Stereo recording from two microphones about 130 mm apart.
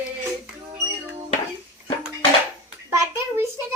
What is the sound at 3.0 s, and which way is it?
Hands, 20° right (ahead or behind).